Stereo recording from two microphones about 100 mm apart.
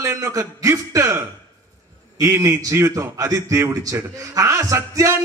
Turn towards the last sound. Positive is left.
turn(degrees=-30)  # may be behind; listen again after turning